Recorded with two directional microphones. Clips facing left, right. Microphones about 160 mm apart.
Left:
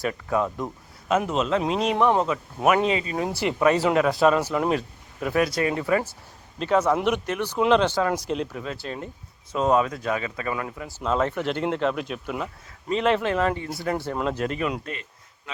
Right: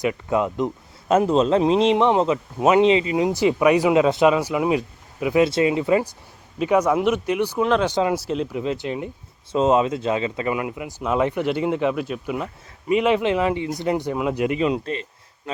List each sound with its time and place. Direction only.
0.0 s speech: 15° right (ahead or behind)
1.0 s speech: 35° right (ahead or behind); by 5.4 s 10° right (ahead or behind)
5.4 s speech: 25° right (ahead or behind)
7.6 s speech: centre (ahead or behind)
7.9 s speech: 15° right (ahead or behind)
8.5 s speech: 20° right (ahead or behind)
14.7 s speech: 30° right (ahead or behind)